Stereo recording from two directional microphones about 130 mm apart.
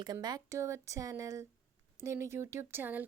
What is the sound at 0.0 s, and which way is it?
Speech, 30° right (ahead or behind).